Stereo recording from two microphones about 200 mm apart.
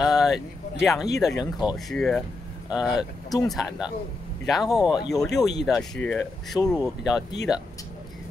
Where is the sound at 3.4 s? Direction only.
Centre (ahead or behind).